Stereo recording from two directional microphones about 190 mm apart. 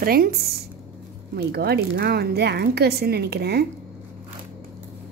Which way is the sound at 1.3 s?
55° right (ahead or behind).